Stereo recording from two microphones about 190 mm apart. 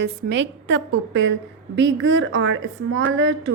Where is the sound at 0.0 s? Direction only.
65° right (ahead or behind).